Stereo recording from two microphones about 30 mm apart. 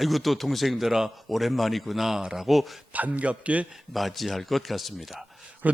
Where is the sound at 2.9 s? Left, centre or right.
Right.